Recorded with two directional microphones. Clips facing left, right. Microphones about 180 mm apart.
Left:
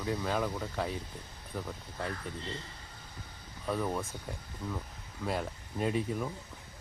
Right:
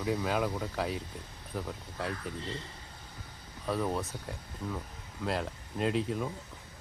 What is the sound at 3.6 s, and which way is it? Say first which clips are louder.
Speech: right 1 dB; 5° right (ahead or behind).